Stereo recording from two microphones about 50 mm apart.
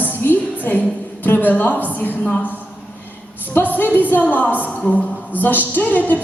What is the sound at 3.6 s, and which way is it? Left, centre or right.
A woman's voice, left.